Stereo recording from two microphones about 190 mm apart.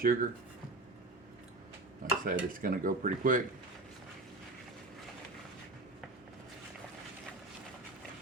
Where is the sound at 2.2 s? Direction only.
50° right (ahead or behind).